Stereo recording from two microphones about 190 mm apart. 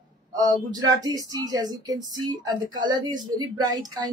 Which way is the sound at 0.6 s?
20° right (ahead or behind).